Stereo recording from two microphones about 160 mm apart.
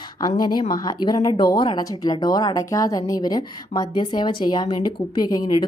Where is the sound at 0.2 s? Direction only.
25° left (ahead or behind).